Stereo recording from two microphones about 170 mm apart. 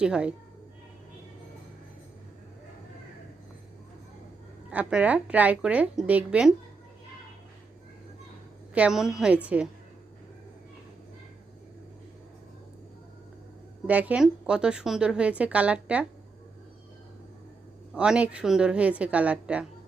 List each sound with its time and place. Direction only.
0.0 s speech: 5° right (ahead or behind)
4.7 s a woman's voice: 5° right (ahead or behind)
8.7 s a woman's voice: 5° right (ahead or behind)
13.8 s a woman's voice: 10° right (ahead or behind)
17.9 s a woman's voice: 5° right (ahead or behind)